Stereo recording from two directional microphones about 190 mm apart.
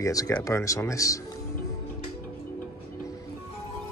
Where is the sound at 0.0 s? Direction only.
15° left (ahead or behind).